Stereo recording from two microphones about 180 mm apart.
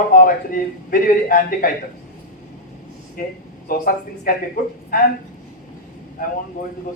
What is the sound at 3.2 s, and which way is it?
A man's voice, 50° left (ahead or behind).